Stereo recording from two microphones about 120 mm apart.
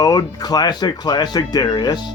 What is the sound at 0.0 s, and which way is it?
Speech, 30° left (ahead or behind).